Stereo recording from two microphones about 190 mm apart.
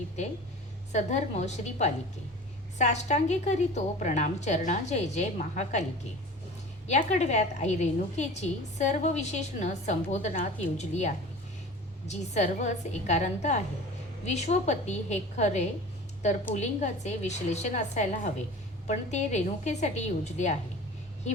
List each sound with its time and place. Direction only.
0.9 s a woman's voice: 35° left (ahead or behind)
6.8 s a woman's voice: 35° left (ahead or behind)